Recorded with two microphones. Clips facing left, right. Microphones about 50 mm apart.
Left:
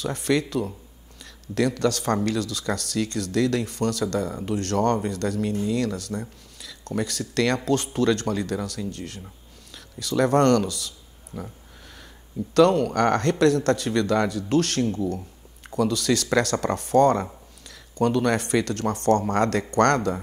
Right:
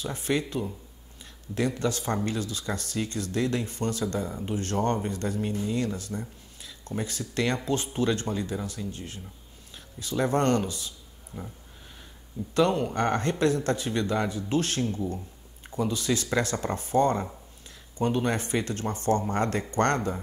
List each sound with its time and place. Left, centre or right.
0.0 s speech: left
1.8 s speech: left
12.4 s a man's voice: left
12.9 s speech: left